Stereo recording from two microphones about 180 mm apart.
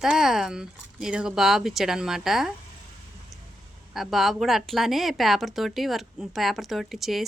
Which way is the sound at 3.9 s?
Centre (ahead or behind).